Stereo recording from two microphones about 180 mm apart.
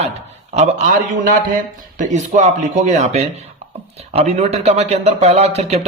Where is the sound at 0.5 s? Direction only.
40° right (ahead or behind).